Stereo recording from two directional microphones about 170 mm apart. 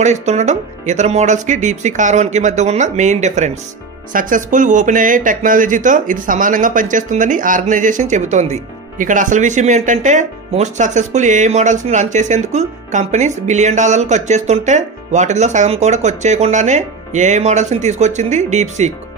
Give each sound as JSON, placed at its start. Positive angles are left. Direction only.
{"t": 0.0, "sound": "speech", "side_deg": -45}
{"t": 4.1, "sound": "speech", "side_deg": -55}